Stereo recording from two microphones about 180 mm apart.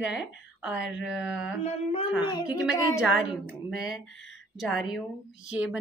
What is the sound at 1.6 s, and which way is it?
Speech, 35° left (ahead or behind).